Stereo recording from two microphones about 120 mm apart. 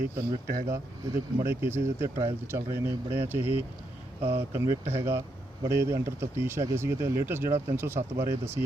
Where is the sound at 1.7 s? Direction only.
20° right (ahead or behind).